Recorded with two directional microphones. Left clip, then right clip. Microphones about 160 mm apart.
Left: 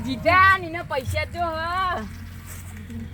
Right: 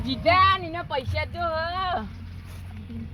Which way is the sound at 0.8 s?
15° left (ahead or behind).